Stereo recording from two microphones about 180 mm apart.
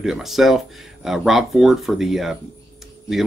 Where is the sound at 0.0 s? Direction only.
Centre (ahead or behind).